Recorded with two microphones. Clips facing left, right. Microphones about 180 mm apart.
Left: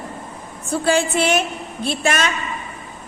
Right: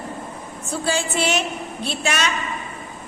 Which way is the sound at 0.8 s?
55° left (ahead or behind).